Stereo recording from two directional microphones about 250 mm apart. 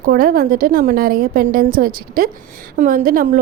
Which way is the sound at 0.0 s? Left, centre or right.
Right.